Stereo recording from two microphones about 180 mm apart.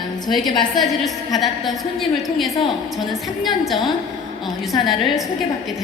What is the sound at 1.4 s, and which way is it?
A woman's voice, centre (ahead or behind).